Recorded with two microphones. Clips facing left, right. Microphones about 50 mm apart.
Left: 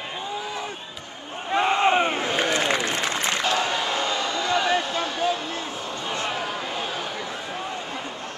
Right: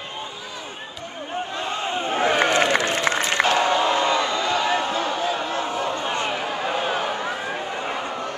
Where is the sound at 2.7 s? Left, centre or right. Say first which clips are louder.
Right 4 dB; right.